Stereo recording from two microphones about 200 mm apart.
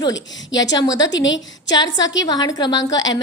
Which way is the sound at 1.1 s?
65° left (ahead or behind).